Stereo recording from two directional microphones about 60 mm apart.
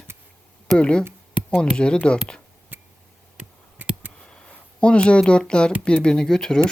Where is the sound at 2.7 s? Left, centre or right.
Right.